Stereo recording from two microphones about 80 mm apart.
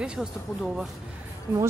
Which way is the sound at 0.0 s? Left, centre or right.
Centre.